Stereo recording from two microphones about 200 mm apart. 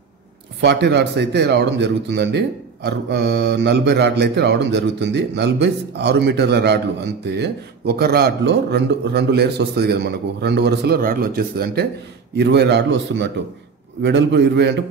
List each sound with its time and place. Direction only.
0.6 s a man's voice: 60° right (ahead or behind)